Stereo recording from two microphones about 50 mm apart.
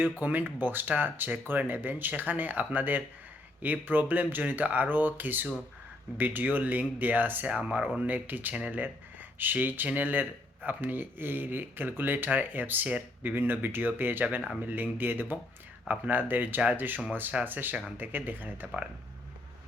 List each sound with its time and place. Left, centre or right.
0.2 s speech: right
9.4 s speech: right